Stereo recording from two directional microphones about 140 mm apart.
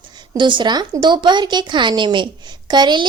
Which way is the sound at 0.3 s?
35° right (ahead or behind).